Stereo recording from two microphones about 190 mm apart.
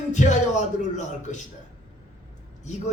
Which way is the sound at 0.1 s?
40° left (ahead or behind).